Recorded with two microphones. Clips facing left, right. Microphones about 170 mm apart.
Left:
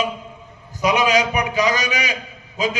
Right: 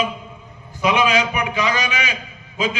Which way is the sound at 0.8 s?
40° left (ahead or behind).